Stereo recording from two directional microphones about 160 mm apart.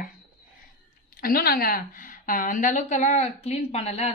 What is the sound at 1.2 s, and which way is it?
A woman's voice, 70° left (ahead or behind).